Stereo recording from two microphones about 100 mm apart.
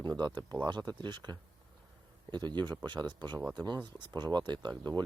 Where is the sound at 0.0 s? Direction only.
45° right (ahead or behind).